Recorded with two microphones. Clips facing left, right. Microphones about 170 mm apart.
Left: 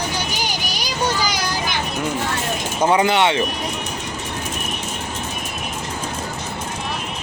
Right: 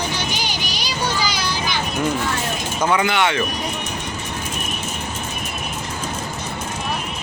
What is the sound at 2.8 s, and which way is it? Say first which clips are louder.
Speech: left 3 dB; 30° left (ahead or behind).